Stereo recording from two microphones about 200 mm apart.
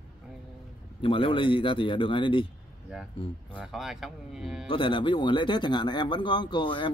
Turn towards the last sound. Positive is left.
turn(degrees=25)  # may be behind; listen again after turning